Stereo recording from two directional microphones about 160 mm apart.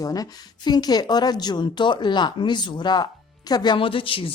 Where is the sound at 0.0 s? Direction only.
25° left (ahead or behind).